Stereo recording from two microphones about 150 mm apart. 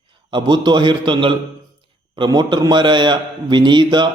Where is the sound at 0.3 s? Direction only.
30° right (ahead or behind).